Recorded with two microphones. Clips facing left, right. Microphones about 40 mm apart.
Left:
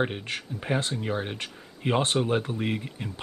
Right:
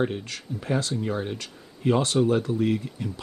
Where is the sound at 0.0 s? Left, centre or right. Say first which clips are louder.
Right 1 dB; left.